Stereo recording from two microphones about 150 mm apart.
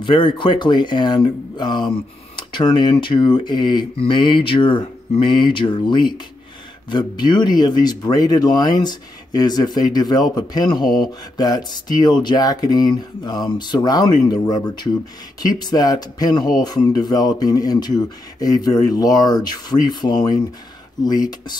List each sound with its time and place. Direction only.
0.0 s speech: 35° left (ahead or behind)